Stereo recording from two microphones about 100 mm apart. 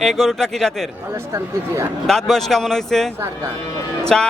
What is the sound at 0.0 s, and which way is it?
Speech, 5° left (ahead or behind).